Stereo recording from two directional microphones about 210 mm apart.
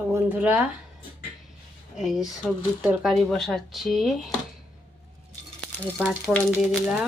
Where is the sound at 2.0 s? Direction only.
Centre (ahead or behind).